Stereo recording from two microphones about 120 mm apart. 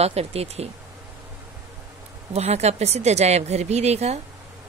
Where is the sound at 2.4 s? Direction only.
60° right (ahead or behind).